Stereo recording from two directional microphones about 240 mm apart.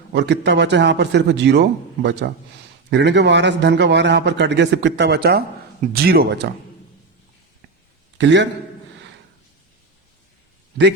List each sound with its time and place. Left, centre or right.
0.1 s a man's voice: right
8.2 s a man's voice: right